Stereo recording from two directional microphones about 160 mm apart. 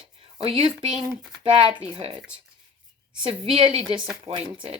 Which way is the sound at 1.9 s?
30° right (ahead or behind).